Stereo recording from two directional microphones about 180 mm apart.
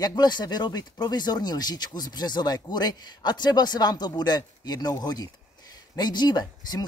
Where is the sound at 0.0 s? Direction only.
25° left (ahead or behind).